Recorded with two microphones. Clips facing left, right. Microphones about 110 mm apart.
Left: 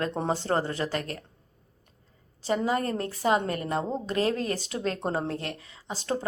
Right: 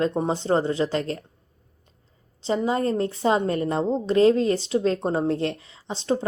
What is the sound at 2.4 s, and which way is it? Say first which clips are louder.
A woman's voice: right 3 dB; 25° right (ahead or behind).